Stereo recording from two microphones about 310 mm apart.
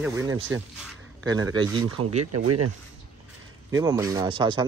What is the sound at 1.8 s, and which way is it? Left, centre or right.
Speech, right.